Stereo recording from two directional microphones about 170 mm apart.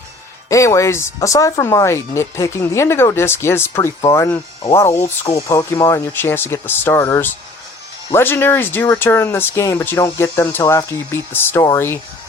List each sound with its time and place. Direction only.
0.4 s speech: 20° left (ahead or behind)